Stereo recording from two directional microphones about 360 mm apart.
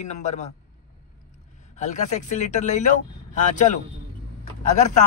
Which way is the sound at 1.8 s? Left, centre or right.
Centre.